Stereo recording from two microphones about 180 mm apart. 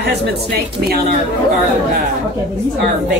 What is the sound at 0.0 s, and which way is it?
Speech, 65° right (ahead or behind).